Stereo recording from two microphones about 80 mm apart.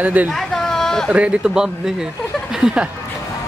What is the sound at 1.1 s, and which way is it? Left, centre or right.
Speech, centre.